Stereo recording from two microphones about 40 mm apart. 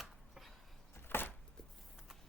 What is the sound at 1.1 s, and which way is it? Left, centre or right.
Chopping, left.